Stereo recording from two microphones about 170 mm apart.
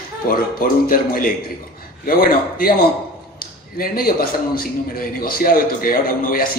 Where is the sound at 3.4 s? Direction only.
60° left (ahead or behind).